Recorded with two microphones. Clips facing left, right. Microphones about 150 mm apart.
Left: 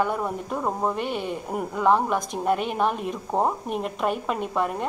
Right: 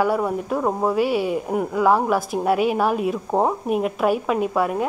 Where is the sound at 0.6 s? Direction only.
20° right (ahead or behind).